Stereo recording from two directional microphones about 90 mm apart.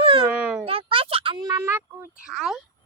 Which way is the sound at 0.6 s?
85° right.